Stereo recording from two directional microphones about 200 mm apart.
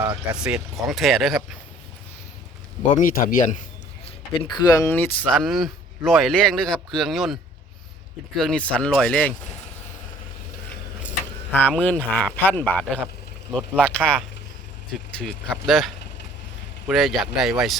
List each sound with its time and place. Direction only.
0.3 s a man's voice: 5° right (ahead or behind)
2.9 s speech: 45° left (ahead or behind)
4.0 s a man's voice: 25° left (ahead or behind); by 7.3 s centre (ahead or behind)
8.4 s a man's voice: 5° left (ahead or behind)
11.5 s a man's voice: 10° left (ahead or behind)